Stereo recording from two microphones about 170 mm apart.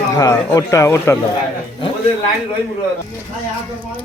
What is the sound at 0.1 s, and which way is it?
Speech, 20° left (ahead or behind).